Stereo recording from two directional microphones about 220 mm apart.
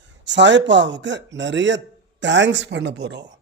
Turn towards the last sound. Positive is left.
turn(degrees=-55)  # may be behind; listen again after turning